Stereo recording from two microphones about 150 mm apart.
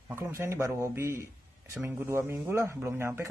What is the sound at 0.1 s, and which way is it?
A man's voice, 20° right (ahead or behind).